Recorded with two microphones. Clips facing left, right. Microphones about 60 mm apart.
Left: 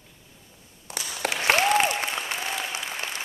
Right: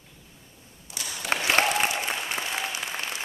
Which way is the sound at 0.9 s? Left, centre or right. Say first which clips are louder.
Left 3 dB; left.